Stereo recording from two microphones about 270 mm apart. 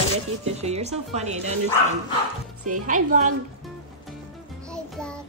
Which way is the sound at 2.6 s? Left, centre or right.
Right.